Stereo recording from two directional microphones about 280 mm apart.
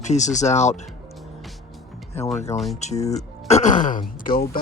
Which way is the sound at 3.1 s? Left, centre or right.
Left.